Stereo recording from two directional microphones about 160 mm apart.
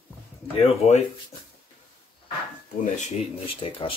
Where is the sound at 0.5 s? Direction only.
40° left (ahead or behind).